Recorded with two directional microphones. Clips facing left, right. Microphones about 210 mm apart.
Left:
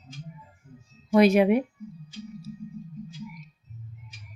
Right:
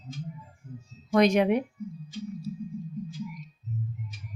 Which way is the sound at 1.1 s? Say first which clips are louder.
Left 3 dB; 5° left (ahead or behind).